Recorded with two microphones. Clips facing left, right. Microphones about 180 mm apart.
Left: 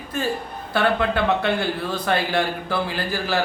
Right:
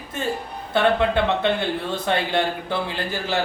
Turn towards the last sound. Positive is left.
turn(degrees=-20)  # may be behind; listen again after turning